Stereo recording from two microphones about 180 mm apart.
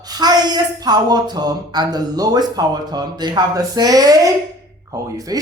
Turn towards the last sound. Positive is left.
turn(degrees=-20)  # may be behind; listen again after turning